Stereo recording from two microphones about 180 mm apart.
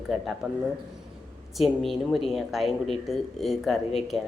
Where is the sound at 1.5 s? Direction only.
Centre (ahead or behind).